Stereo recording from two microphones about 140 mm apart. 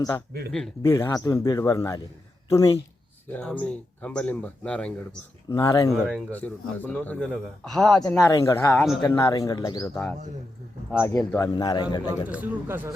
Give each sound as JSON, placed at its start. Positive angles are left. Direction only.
{"t": 0.8, "sound": "a man's voice", "side_deg": 20}
{"t": 3.3, "sound": "a man's voice", "side_deg": 10}
{"t": 5.5, "sound": "a man's voice", "side_deg": 25}
{"t": 5.9, "sound": "speech", "side_deg": 0}
{"t": 6.3, "sound": "a man's voice", "side_deg": 10}
{"t": 8.1, "sound": "a man's voice", "side_deg": 25}
{"t": 11.5, "sound": "a man's voice", "side_deg": 30}
{"t": 12.3, "sound": "speech", "side_deg": -10}